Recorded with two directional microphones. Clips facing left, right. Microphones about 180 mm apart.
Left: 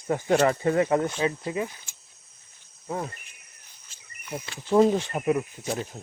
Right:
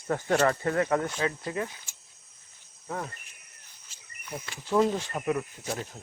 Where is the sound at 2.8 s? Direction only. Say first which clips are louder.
Left 4 dB; 15° left (ahead or behind).